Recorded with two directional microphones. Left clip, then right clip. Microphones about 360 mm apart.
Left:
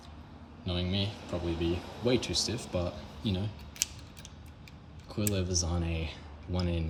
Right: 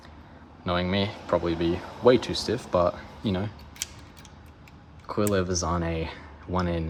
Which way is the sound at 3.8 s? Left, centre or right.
Centre.